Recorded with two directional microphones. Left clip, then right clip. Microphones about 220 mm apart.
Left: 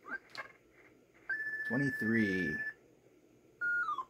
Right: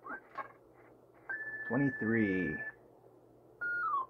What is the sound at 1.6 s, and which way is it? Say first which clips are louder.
Speech: right 3 dB; 15° left (ahead or behind).